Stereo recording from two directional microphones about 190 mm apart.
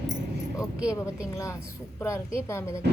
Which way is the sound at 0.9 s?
15° left (ahead or behind).